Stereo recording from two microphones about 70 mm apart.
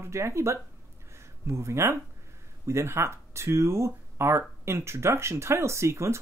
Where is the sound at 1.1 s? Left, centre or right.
Right.